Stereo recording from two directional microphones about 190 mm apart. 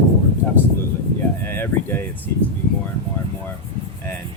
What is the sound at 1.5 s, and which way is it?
Speech, 10° left (ahead or behind).